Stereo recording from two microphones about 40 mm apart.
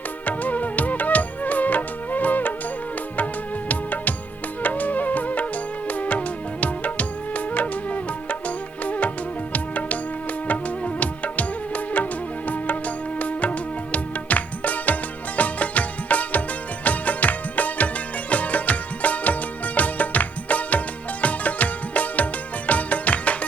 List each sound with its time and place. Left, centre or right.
0.3 s music: left
3.7 s music: left
13.1 s music: left